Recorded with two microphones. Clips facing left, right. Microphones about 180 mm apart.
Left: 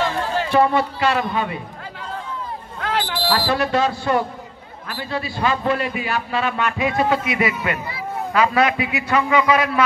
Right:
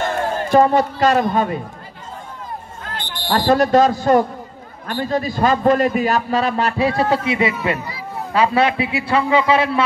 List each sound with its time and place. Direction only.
0.0 s run: 50° right (ahead or behind)
0.5 s a man's voice: 45° right (ahead or behind)
2.8 s a sound: 90° left
3.3 s a man's voice: 40° right (ahead or behind)